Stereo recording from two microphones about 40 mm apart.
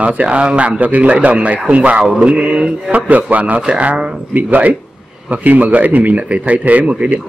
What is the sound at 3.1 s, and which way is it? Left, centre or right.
A man's voice, right.